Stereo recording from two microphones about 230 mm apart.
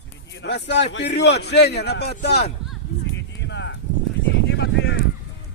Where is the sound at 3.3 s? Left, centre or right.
Left.